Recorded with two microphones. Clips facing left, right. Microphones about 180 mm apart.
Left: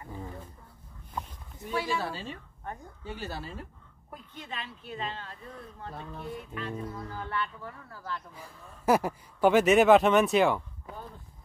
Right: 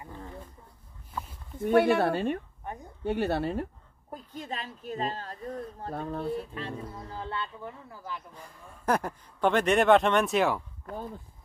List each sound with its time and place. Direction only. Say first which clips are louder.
1.6 s speech: right 10 dB; 60° right (ahead or behind)
2.6 s a woman's voice: right 1 dB; 15° right (ahead or behind)
3.0 s speech: right 13 dB; 60° right (ahead or behind)
4.1 s a woman's voice: right 5 dB; 40° right (ahead or behind); by 8.2 s 15° right (ahead or behind)
8.4 s speech: even; 10° left (ahead or behind)